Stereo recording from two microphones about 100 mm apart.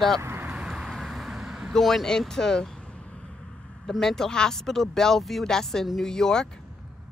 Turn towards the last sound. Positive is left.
turn(degrees=5)  # may be behind; listen again after turning